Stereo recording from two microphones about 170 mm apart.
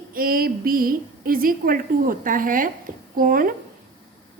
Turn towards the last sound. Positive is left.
turn(degrees=-55)  # may be behind; listen again after turning